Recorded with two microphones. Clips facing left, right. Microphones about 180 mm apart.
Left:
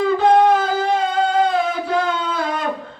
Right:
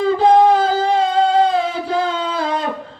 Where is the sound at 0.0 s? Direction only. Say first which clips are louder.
Right 2 dB; 30° right (ahead or behind).